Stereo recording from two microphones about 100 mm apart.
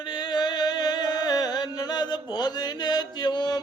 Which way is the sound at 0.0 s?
45° left (ahead or behind).